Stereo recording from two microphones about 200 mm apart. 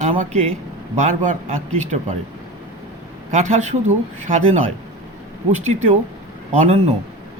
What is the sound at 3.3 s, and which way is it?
Speech, 35° right (ahead or behind).